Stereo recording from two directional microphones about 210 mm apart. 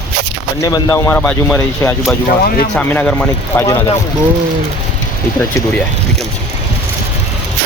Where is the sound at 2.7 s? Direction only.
10° left (ahead or behind).